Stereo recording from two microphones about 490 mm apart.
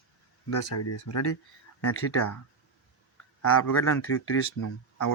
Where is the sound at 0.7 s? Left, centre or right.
Left.